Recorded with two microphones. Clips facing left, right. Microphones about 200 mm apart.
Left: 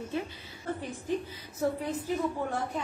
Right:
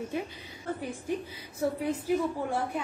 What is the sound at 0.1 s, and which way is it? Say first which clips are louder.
A woman's voice: even; 15° right (ahead or behind).